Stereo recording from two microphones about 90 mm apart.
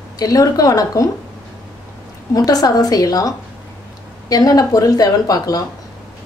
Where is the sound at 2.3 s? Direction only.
45° left (ahead or behind).